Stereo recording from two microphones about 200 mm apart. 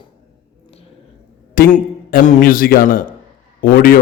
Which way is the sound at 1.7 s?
45° left (ahead or behind).